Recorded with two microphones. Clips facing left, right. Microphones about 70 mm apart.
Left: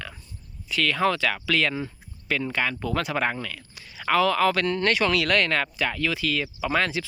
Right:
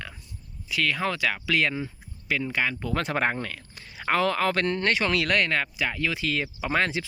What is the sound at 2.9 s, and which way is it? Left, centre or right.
Speech, right.